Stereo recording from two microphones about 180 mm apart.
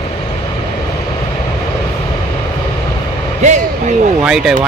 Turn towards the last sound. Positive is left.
turn(degrees=-5)  # may be behind; listen again after turning